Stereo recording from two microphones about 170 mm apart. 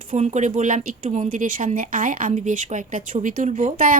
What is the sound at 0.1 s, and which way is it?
Speech, 45° right (ahead or behind).